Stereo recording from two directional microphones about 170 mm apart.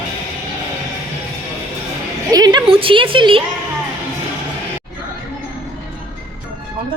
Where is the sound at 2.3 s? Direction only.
25° right (ahead or behind).